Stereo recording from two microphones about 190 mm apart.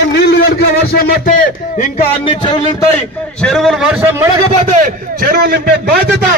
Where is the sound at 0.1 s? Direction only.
60° left (ahead or behind).